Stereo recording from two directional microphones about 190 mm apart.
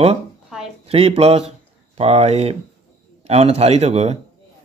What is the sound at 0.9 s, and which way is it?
Speech, 30° right (ahead or behind).